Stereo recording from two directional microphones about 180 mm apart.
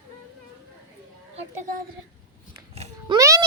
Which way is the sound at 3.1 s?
15° right (ahead or behind).